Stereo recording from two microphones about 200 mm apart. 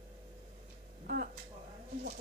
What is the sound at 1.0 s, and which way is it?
Speech, 50° right (ahead or behind).